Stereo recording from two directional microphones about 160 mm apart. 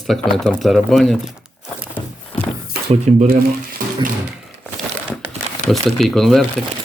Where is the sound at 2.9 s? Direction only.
45° right (ahead or behind).